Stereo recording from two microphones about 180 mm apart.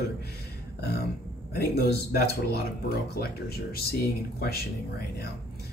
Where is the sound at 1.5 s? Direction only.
60° left (ahead or behind).